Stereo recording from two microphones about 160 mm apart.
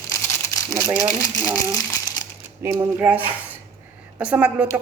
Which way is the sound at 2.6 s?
15° right (ahead or behind).